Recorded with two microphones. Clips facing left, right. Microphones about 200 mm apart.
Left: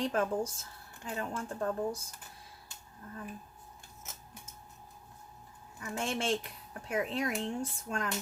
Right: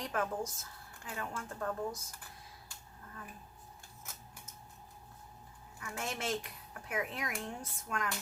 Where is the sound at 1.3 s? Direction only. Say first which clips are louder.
Left 4 dB; 30° left (ahead or behind).